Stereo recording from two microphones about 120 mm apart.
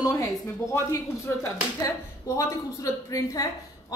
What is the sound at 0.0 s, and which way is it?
Speech, 30° left (ahead or behind).